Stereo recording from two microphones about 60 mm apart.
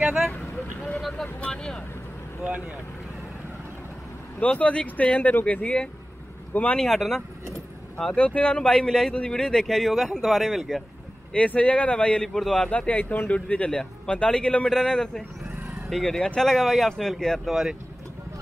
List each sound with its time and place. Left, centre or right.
0.0 s speech: centre
0.9 s vehicle: centre
1.2 s speech: centre
4.4 s speech: left
7.0 s speech: centre
8.1 s speech: left; by 10.8 s centre
11.3 s speech: left
12.4 s speech: centre
12.6 s speech: left
17.5 s speech: centre